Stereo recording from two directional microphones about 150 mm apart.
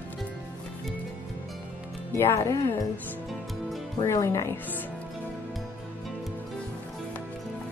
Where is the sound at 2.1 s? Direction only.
20° left (ahead or behind).